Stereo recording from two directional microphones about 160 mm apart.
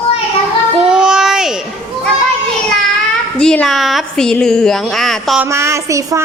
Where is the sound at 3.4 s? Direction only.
5° left (ahead or behind).